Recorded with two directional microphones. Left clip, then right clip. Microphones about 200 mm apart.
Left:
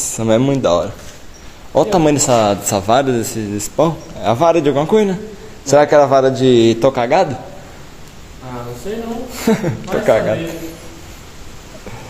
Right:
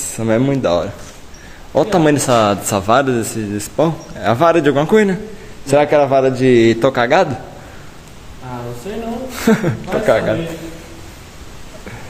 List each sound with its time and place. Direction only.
0.1 s speech: 5° left (ahead or behind)
8.9 s a woman's voice: 20° right (ahead or behind)
10.0 s speech: centre (ahead or behind)